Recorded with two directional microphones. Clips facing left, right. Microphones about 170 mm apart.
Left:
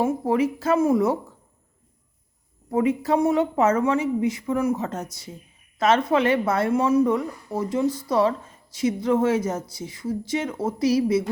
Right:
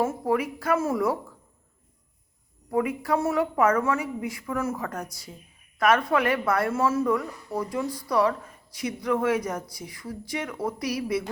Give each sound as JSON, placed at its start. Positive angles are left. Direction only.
{"t": 0.0, "sound": "speech", "side_deg": 20}
{"t": 2.6, "sound": "speech", "side_deg": 25}